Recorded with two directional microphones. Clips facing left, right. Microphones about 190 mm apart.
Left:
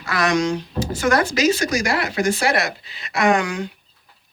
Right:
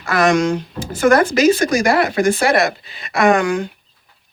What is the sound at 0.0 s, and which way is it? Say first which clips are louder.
Speech: right 5 dB; 50° right (ahead or behind).